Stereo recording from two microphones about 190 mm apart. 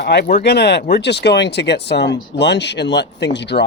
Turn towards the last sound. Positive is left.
turn(degrees=65)  # may be behind; listen again after turning